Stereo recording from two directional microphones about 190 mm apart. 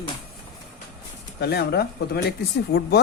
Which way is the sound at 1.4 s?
60° left (ahead or behind).